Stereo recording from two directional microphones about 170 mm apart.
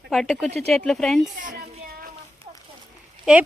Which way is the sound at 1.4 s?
55° right (ahead or behind).